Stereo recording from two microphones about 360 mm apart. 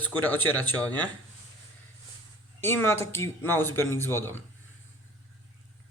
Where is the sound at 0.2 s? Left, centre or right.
Centre.